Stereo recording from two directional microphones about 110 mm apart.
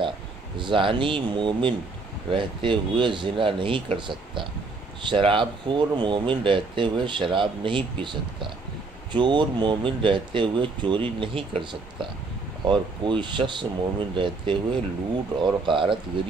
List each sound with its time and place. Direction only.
0.6 s speech: 50° right (ahead or behind)